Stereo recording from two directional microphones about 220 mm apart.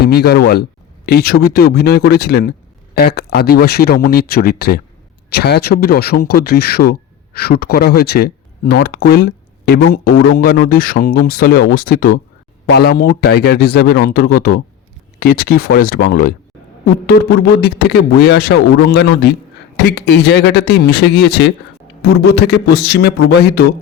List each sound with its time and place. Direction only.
0.0 s speech: 45° left (ahead or behind)
17.3 s speech: 45° left (ahead or behind)